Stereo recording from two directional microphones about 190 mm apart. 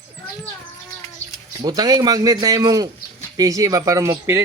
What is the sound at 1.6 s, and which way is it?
A man's voice, 20° right (ahead or behind).